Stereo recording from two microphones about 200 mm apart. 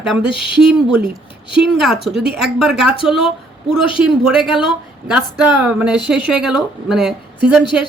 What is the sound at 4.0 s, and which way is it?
A woman's voice, 5° right (ahead or behind).